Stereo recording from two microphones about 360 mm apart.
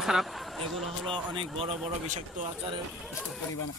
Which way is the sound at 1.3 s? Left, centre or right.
Centre.